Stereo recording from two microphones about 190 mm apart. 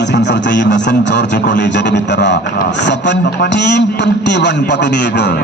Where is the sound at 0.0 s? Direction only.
65° left (ahead or behind).